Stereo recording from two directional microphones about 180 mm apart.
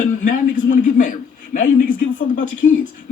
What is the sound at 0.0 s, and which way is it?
A man's voice, 45° left (ahead or behind).